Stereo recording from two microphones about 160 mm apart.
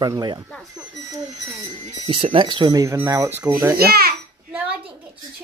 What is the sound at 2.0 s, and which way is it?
Speech, 35° right (ahead or behind).